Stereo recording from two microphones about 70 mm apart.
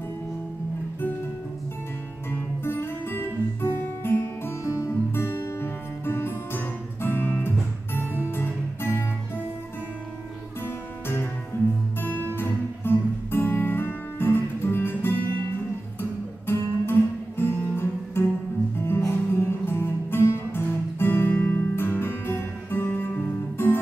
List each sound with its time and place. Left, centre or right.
2.3 s guitar: left
4.8 s music: left
12.0 s guitar: left
12.4 s music: left
16.0 s guitar: left
18.8 s music: left